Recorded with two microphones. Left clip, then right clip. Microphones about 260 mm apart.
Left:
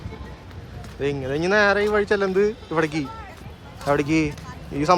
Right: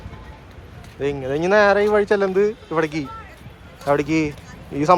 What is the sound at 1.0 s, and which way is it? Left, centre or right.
A man's voice, centre.